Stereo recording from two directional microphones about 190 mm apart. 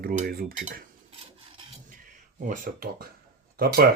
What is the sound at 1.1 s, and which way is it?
Filing, 30° right (ahead or behind).